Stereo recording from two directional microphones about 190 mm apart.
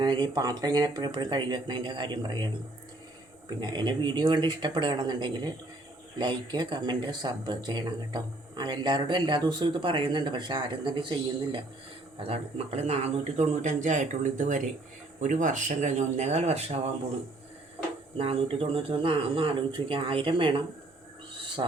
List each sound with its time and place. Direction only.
0.0 s speech: 20° right (ahead or behind)
3.6 s speech: 25° right (ahead or behind)
12.3 s speech: 35° right (ahead or behind)
18.2 s speech: 30° right (ahead or behind)
21.6 s speech: 25° right (ahead or behind)